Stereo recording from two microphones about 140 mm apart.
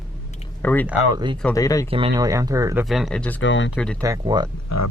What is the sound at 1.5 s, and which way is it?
Speech, 25° left (ahead or behind).